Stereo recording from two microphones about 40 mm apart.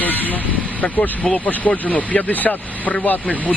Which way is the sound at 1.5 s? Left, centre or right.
Left.